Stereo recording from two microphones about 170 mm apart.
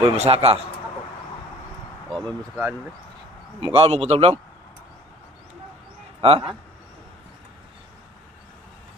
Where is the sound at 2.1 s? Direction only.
5° left (ahead or behind).